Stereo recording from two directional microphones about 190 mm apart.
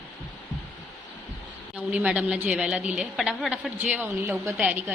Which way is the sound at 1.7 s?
5° right (ahead or behind).